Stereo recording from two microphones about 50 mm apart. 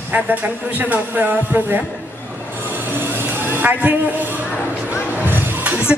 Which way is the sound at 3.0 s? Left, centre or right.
Right.